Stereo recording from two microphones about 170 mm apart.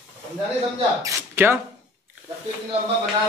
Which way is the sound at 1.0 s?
15° right (ahead or behind).